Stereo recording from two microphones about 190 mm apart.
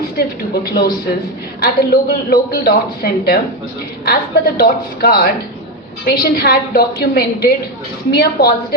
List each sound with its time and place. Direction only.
0.6 s a woman's voice: 55° left (ahead or behind)